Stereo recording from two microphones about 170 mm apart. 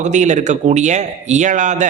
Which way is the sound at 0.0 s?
45° right (ahead or behind).